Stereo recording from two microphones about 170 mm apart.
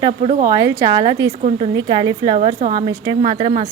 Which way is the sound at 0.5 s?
20° right (ahead or behind).